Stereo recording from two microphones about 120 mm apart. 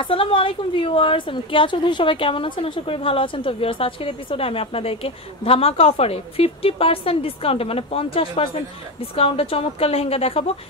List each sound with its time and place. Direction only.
0.0 s a woman's voice: 45° left (ahead or behind)